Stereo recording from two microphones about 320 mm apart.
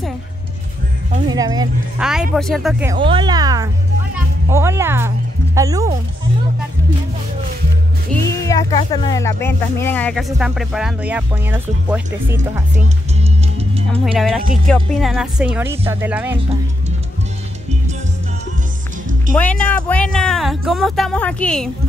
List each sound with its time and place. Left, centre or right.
1.3 s speech: centre
2.3 s speech: centre
8.1 s speech: centre
13.6 s music: centre
14.1 s speech: centre
19.3 s speech: centre